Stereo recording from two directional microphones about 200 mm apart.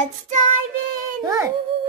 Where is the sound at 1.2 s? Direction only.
15° right (ahead or behind).